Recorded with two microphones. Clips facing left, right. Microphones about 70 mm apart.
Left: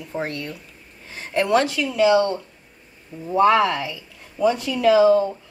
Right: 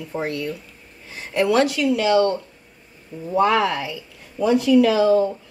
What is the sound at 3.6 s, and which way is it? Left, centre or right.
Speech, centre.